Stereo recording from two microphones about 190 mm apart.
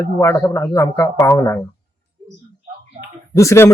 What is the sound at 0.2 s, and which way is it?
Speech, 15° left (ahead or behind).